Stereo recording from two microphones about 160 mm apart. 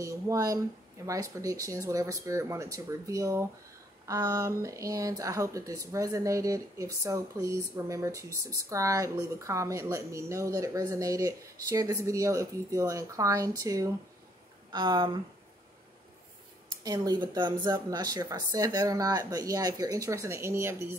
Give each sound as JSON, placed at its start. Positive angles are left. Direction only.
{"t": 0.0, "sound": "speech", "side_deg": -20}
{"t": 16.8, "sound": "speech", "side_deg": -25}